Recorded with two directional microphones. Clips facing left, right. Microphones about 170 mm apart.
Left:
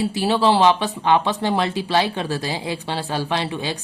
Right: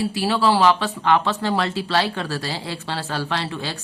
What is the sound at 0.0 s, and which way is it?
Speech, 20° left (ahead or behind).